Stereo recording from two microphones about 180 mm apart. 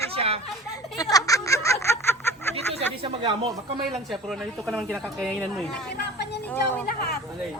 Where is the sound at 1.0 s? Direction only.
20° left (ahead or behind).